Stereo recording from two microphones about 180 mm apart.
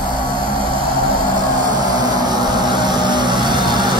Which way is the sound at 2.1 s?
25° right (ahead or behind).